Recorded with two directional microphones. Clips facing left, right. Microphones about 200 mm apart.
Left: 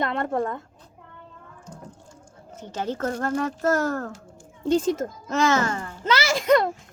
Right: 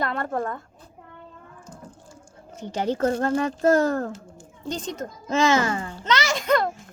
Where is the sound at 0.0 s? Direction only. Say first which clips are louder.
Left 2 dB; 25° left (ahead or behind).